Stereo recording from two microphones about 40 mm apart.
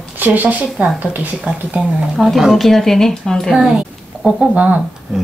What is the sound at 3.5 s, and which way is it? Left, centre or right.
Speech, centre.